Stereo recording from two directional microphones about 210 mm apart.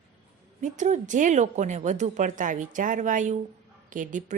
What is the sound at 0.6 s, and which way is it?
A woman's voice, 35° right (ahead or behind).